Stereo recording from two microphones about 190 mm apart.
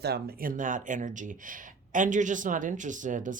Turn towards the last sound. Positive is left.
turn(degrees=-45)  # may be behind; listen again after turning